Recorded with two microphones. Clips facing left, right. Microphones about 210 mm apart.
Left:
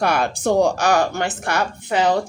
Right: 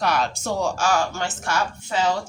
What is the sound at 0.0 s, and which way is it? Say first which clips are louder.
Speech: left 4 dB; 55° left (ahead or behind).